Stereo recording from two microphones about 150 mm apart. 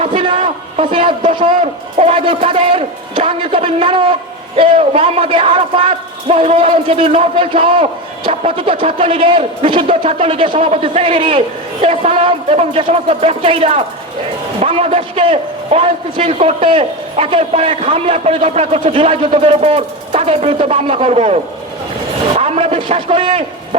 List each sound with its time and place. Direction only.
0.0 s a man's voice: 35° right (ahead or behind)